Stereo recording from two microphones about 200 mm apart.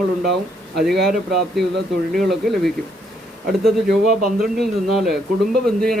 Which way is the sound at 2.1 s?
Centre (ahead or behind).